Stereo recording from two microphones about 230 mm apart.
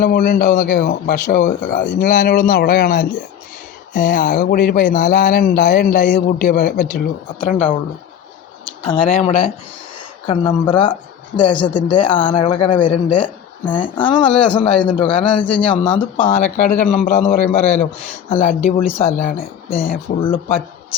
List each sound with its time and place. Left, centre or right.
0.0 s speech: left
8.9 s a man's voice: left
19.4 s speech: left
20.2 s a man's voice: left